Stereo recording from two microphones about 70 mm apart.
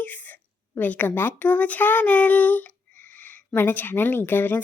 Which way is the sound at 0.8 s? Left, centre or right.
Left.